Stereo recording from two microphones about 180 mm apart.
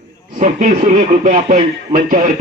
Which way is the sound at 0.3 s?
45° right (ahead or behind).